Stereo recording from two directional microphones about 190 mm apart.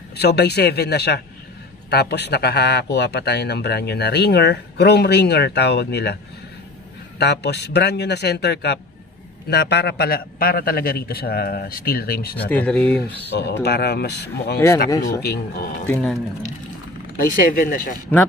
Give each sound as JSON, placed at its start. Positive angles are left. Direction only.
{"t": 0.1, "sound": "speech", "side_deg": 60}
{"t": 7.2, "sound": "a man's voice", "side_deg": 60}
{"t": 12.4, "sound": "speech", "side_deg": 10}
{"t": 13.3, "sound": "speech", "side_deg": 60}
{"t": 14.9, "sound": "speech", "side_deg": 20}
{"t": 15.9, "sound": "speech", "side_deg": 5}
{"t": 17.3, "sound": "a man's voice", "side_deg": 50}